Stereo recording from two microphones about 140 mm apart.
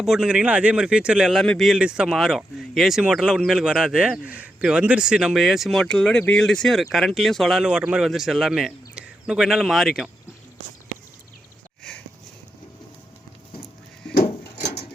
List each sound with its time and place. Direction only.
0.0 s speech: 5° right (ahead or behind)
14.3 s drawer open or close: 50° left (ahead or behind)